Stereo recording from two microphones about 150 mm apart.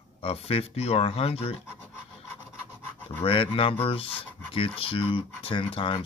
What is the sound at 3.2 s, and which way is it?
Speech, 35° left (ahead or behind).